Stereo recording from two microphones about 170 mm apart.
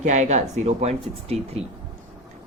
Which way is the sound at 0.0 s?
45° right (ahead or behind).